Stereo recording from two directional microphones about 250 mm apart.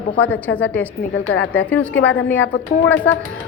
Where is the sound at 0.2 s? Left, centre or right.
Centre.